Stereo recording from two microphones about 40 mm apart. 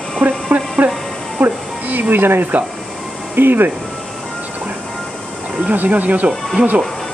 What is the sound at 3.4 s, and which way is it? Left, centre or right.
Speech, right.